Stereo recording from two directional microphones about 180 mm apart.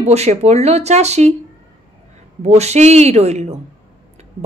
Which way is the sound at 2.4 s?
35° right (ahead or behind).